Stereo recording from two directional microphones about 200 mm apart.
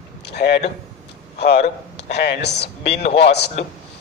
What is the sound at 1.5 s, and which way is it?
A man's voice, 55° left (ahead or behind).